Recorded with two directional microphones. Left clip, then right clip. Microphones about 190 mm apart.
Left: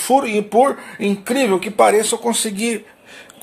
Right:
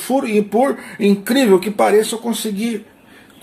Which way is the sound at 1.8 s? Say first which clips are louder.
Left 1 dB; 25° left (ahead or behind).